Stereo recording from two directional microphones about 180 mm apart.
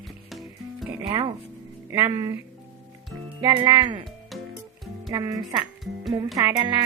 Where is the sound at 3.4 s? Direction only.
25° right (ahead or behind).